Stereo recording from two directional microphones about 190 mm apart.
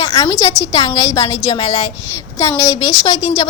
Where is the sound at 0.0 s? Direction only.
20° left (ahead or behind).